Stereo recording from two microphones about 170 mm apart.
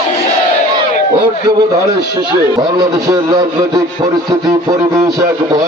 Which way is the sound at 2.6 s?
20° right (ahead or behind).